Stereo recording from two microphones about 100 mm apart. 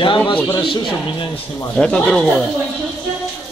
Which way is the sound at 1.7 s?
10° left (ahead or behind).